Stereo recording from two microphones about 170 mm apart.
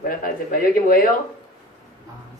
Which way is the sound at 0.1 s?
55° left (ahead or behind).